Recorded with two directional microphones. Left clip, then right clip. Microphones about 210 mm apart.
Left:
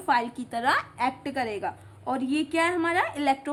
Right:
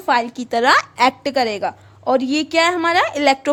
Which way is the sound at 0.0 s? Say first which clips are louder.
Right 7 dB; 45° right (ahead or behind).